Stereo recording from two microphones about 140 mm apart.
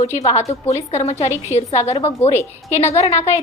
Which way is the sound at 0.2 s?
25° left (ahead or behind).